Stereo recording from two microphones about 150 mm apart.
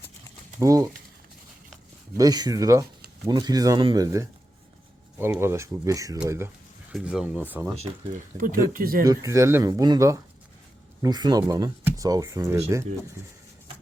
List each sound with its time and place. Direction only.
0.6 s speech: 20° right (ahead or behind)
2.1 s speech: 25° right (ahead or behind)
6.9 s speech: 5° right (ahead or behind)
7.8 s speech: 45° right (ahead or behind)
8.4 s speech: 70° right (ahead or behind)
9.0 s speech: 20° right (ahead or behind)